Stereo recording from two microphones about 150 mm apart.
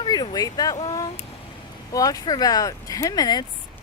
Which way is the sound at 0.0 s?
25° left (ahead or behind).